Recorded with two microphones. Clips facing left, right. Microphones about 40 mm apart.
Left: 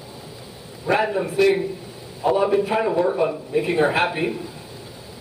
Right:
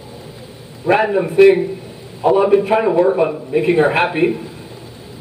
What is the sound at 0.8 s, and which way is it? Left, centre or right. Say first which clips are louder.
A man's voice: right 6 dB; right.